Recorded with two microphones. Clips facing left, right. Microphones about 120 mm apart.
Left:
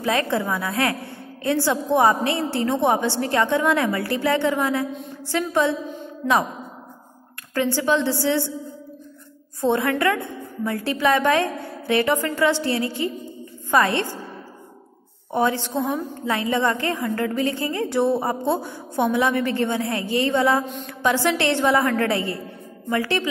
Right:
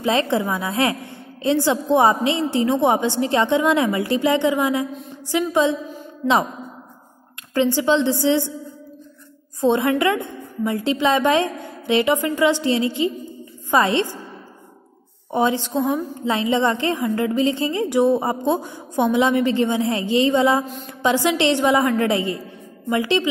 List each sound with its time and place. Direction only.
0.0 s a woman's voice: 20° right (ahead or behind)
7.5 s a woman's voice: 20° right (ahead or behind)
9.6 s a woman's voice: 20° right (ahead or behind)
15.3 s a woman's voice: 15° right (ahead or behind)